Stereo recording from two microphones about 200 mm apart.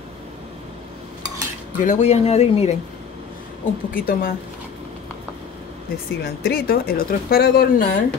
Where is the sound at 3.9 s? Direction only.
45° left (ahead or behind).